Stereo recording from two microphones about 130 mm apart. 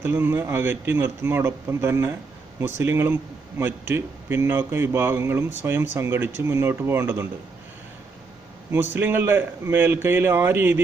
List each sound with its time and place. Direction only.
0.0 s a man's voice: 15° right (ahead or behind)
8.7 s a man's voice: 15° right (ahead or behind)